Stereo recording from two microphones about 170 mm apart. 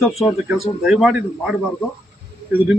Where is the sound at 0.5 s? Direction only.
Centre (ahead or behind).